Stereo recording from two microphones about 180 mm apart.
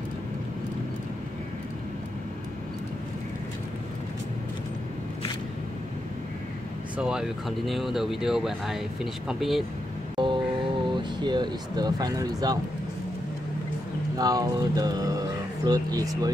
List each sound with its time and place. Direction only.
7.0 s speech: 5° right (ahead or behind)
10.1 s a sound: 25° right (ahead or behind)
10.9 s speech: 25° right (ahead or behind)
14.1 s speech: 20° right (ahead or behind)